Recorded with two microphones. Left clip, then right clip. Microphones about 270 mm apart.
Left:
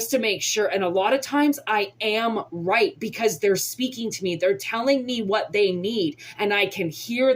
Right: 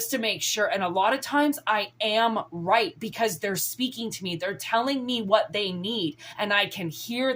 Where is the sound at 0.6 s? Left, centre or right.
Right.